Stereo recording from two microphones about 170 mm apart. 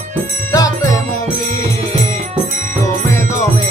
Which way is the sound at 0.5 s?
20° left (ahead or behind).